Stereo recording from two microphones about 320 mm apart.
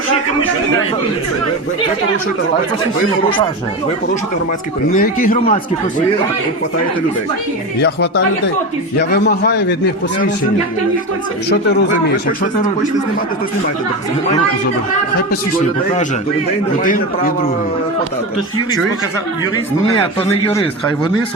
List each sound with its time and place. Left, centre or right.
4.9 s speech: left
7.8 s a man's voice: left
11.4 s a man's voice: left
16.8 s speech: left
19.8 s a man's voice: centre